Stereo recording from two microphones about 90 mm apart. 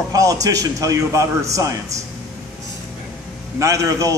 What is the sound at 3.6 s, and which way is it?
Speech, 40° right (ahead or behind).